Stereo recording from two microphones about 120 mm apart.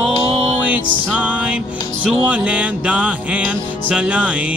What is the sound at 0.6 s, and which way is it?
Music, 10° right (ahead or behind).